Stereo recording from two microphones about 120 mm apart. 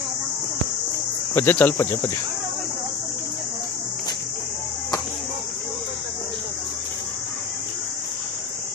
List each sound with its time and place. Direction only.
1.3 s speech: 15° left (ahead or behind)